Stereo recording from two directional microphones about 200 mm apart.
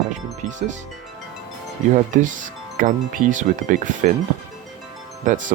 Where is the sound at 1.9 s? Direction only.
40° right (ahead or behind).